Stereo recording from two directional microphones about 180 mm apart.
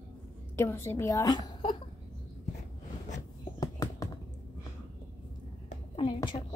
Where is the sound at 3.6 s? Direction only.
20° left (ahead or behind).